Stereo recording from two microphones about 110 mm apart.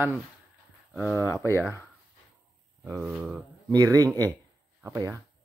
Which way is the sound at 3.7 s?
35° right (ahead or behind).